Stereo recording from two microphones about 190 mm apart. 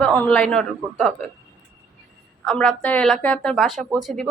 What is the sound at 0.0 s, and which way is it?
A woman's voice, 5° left (ahead or behind).